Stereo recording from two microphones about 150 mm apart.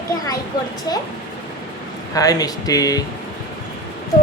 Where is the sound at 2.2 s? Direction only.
25° left (ahead or behind).